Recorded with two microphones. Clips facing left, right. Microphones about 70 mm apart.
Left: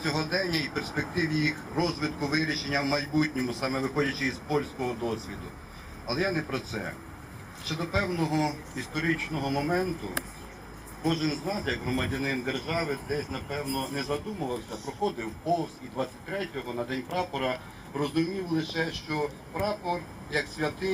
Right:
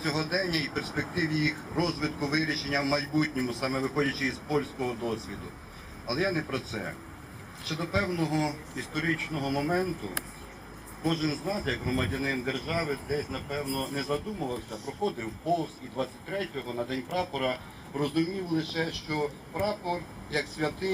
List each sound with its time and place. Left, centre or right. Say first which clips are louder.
0.0 s a man's voice: left 1 dB; centre
15.6 s a man's voice: left 1 dB; centre
18.1 s speech: left 1 dB; left